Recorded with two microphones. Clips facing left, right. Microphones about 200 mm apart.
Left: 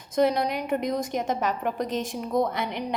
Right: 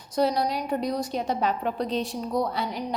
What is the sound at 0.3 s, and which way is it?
Speech, 55° left (ahead or behind).